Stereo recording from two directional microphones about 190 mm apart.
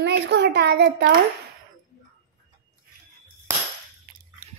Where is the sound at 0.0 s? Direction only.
65° right (ahead or behind).